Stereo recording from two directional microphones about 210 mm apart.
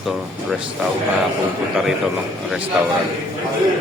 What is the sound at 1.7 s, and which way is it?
Speech, centre (ahead or behind).